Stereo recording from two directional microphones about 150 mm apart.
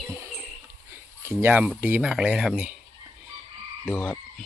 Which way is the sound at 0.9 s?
15° right (ahead or behind).